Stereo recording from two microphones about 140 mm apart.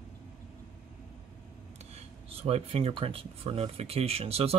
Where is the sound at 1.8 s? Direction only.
45° right (ahead or behind).